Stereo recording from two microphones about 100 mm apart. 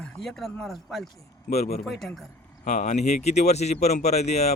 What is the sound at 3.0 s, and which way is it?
Speech, 90° left.